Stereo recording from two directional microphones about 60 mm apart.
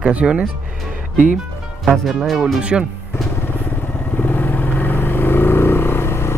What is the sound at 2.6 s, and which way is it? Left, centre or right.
Speech, centre.